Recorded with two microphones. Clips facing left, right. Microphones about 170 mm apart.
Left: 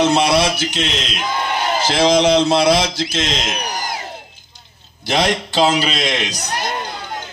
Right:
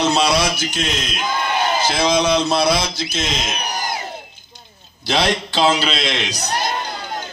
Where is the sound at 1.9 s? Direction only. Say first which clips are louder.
Left 6 dB; 90° left.